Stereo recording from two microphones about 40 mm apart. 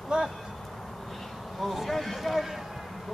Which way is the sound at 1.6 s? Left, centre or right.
Centre.